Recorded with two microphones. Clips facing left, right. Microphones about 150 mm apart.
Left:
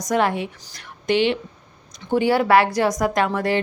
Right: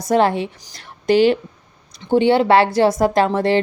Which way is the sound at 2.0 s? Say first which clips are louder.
Right 4 dB; 25° right (ahead or behind).